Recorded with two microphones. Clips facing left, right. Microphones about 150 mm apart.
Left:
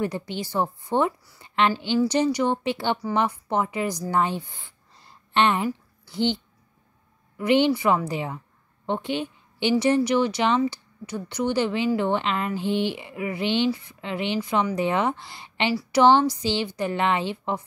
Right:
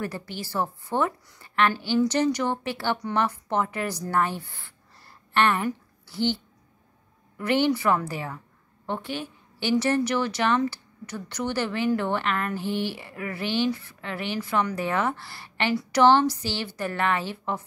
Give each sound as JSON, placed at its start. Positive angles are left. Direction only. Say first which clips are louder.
{"t": 0.0, "sound": "a woman's voice", "louder": "left 5 dB", "side_deg": 20}
{"t": 15.7, "sound": "a woman's voice", "louder": "even", "side_deg": 5}
{"t": 16.0, "sound": "speech", "louder": "left 1 dB", "side_deg": 15}